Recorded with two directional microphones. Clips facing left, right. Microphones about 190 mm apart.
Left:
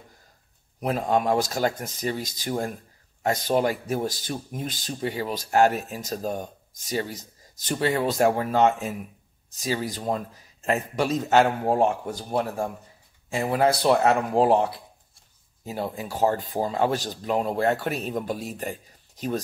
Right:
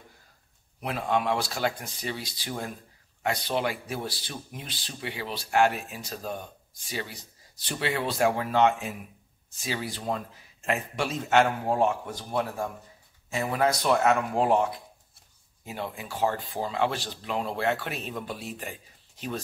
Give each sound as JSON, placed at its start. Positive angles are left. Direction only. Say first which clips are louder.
{"t": 0.7, "sound": "speech", "louder": "left 4 dB", "side_deg": 40}